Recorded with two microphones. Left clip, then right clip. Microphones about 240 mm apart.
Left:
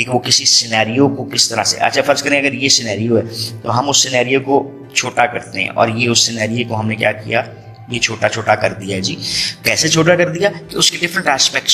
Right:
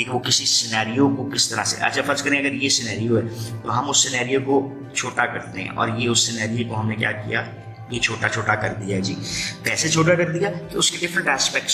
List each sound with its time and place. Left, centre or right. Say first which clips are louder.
0.0 s a man's voice: left 7 dB; left